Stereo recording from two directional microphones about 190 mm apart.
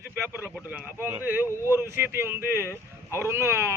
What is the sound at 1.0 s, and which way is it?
Speech, 10° right (ahead or behind).